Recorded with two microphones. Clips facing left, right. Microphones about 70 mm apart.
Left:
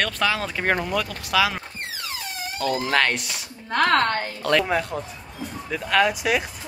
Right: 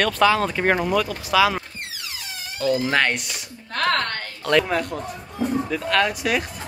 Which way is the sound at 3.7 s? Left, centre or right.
Left.